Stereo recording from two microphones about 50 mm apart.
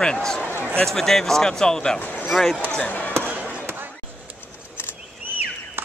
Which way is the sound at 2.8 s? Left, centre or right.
Left.